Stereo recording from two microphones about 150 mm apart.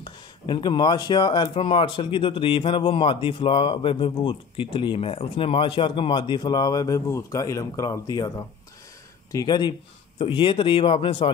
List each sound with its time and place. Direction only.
0.0 s speech: 30° left (ahead or behind)
9.3 s speech: 25° left (ahead or behind)